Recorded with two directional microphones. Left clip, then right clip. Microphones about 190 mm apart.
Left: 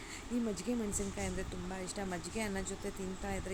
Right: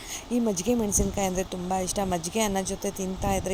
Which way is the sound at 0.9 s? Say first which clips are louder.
Right 13 dB; 40° right (ahead or behind).